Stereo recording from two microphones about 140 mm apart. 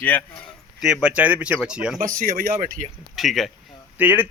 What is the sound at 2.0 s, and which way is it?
Speech, 75° right (ahead or behind).